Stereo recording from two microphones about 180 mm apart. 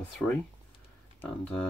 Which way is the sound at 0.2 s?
5° left (ahead or behind).